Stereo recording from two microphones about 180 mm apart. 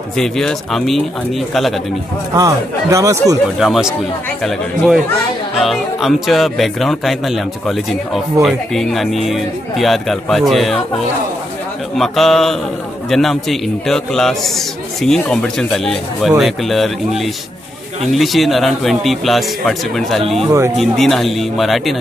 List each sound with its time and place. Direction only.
0.2 s speech: 5° left (ahead or behind)
2.3 s speech: 20° right (ahead or behind)
3.5 s speech: centre (ahead or behind)
5.6 s speech: centre (ahead or behind)
12.0 s speech: centre (ahead or behind)
20.4 s speech: 15° right (ahead or behind)
20.7 s speech: centre (ahead or behind)